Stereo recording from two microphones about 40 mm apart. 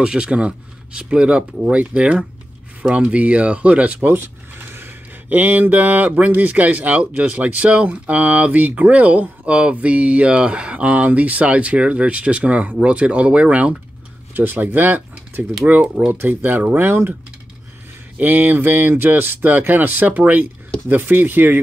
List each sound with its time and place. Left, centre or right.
0.0 s speech: right
5.3 s speech: right
9.5 s speech: right
9.8 s speech: right
14.3 s speech: right
16.1 s speech: right
16.4 s speech: right
18.2 s speech: right